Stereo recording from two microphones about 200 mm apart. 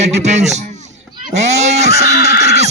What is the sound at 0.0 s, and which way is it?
A man's voice, 35° right (ahead or behind).